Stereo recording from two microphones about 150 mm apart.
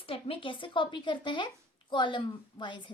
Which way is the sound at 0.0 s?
40° left (ahead or behind).